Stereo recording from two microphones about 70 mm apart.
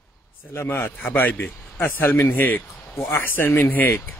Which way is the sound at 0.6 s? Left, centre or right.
Left.